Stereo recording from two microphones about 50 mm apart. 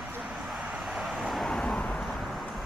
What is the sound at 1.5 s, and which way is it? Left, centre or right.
Vehicle, centre.